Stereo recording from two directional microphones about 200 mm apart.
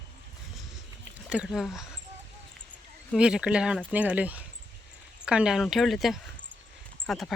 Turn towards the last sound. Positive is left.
turn(degrees=0)  # may be behind; listen again after turning